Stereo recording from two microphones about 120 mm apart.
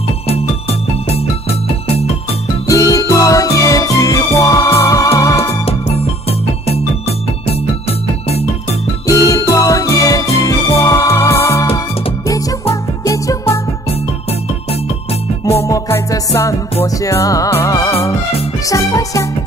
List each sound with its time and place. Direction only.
0.3 s music: 55° left (ahead or behind)
2.6 s music: 30° left (ahead or behind)
5.7 s music: 55° left (ahead or behind)
9.0 s music: 30° left (ahead or behind)
15.6 s music: 25° left (ahead or behind)